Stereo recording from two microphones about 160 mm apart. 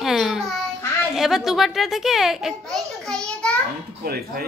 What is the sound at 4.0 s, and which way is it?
Speech, 70° right (ahead or behind).